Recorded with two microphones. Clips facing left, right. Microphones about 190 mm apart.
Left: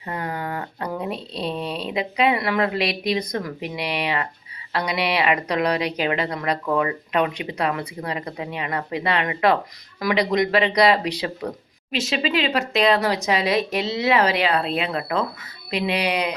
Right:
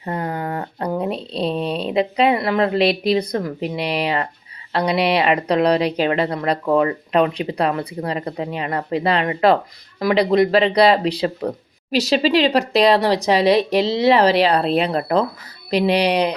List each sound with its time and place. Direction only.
0.0 s a woman's voice: 30° right (ahead or behind)